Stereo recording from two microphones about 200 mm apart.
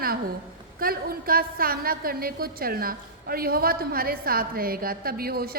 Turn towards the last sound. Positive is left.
turn(degrees=-50)  # may be behind; listen again after turning